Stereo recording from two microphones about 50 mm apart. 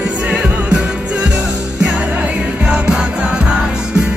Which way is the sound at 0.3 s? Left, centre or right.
Right.